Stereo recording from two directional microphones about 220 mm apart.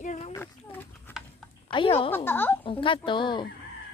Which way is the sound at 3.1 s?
20° left (ahead or behind).